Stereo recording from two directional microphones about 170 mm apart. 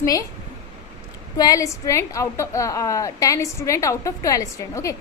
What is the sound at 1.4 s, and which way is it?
A woman's voice, 20° left (ahead or behind).